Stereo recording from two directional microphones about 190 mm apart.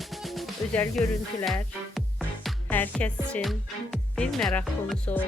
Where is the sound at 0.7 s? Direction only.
5° left (ahead or behind).